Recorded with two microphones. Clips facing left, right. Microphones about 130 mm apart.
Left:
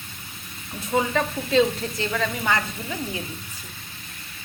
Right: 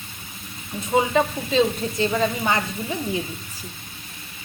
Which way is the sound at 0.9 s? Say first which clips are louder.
Right 3 dB; 20° right (ahead or behind).